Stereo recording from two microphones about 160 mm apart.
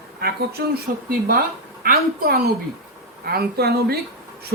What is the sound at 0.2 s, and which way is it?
Speech, 75° right (ahead or behind).